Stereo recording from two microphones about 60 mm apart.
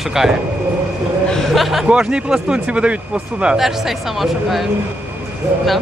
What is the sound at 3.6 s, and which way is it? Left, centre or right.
Speech, centre.